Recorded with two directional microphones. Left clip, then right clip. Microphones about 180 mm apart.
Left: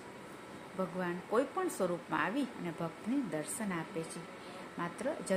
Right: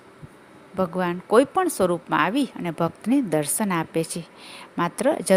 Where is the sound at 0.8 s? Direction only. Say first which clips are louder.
Right 13 dB; 55° right (ahead or behind).